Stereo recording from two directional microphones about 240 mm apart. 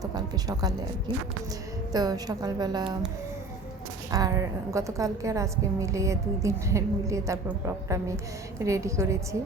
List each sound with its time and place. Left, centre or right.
0.0 s a woman's voice: centre
1.9 s a woman's voice: centre
4.1 s a woman's voice: centre